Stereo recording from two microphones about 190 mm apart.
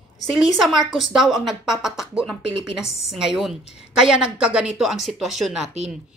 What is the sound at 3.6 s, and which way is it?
Speech, 35° left (ahead or behind).